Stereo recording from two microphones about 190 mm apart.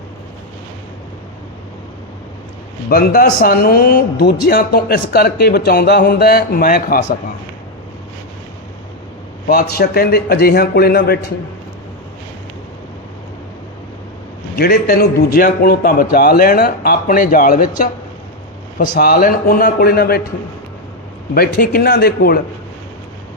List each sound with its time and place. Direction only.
2.9 s speech: 55° left (ahead or behind)
9.5 s a man's voice: 55° left (ahead or behind)
14.5 s speech: 50° left (ahead or behind)
21.3 s speech: 50° left (ahead or behind)